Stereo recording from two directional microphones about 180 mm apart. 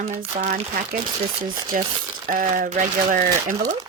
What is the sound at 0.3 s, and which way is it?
Speech, 50° right (ahead or behind).